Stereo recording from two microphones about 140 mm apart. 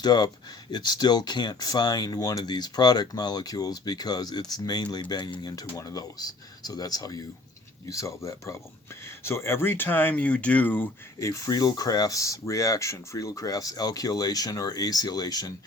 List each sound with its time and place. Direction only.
0.0 s speech: 30° left (ahead or behind)